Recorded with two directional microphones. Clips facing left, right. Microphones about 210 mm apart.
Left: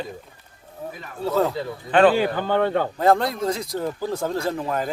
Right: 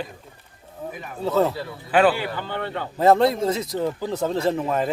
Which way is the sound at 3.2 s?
25° right (ahead or behind).